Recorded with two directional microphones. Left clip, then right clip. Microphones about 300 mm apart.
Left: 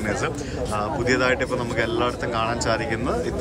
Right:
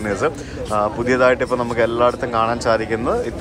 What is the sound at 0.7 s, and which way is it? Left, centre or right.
Speech, centre.